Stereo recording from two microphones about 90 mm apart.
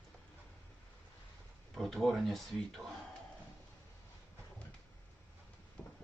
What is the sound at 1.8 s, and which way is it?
Speech, 5° left (ahead or behind).